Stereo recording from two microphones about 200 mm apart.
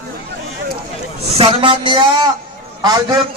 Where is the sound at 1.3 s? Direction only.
25° right (ahead or behind).